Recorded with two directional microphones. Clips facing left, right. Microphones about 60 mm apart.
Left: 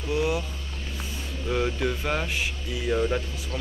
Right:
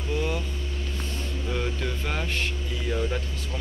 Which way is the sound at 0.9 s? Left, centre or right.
Centre.